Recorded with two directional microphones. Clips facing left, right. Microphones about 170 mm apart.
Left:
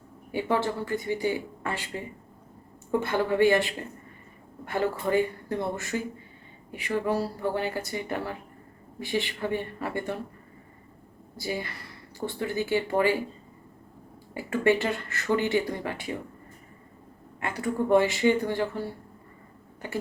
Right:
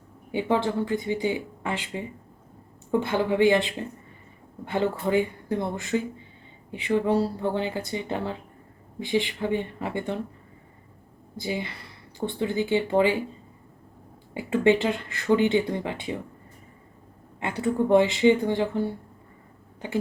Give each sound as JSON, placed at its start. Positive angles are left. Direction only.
{"t": 0.3, "sound": "speech", "side_deg": -20}
{"t": 11.3, "sound": "speech", "side_deg": -20}
{"t": 14.3, "sound": "speech", "side_deg": -20}
{"t": 17.4, "sound": "speech", "side_deg": -20}